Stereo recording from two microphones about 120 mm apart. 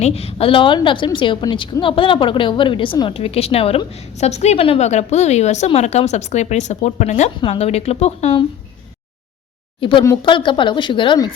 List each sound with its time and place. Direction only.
0.0 s a woman's voice: 60° left (ahead or behind)
4.9 s speech: 70° left (ahead or behind)
7.4 s a woman's voice: 55° left (ahead or behind)
9.8 s a woman's voice: 45° left (ahead or behind)